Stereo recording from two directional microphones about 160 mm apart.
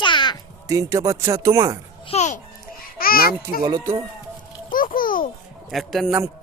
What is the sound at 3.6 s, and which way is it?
Speech, 20° right (ahead or behind).